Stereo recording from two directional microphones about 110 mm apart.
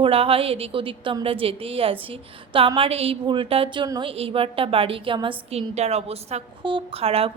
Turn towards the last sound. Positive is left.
turn(degrees=-65)  # may be behind; listen again after turning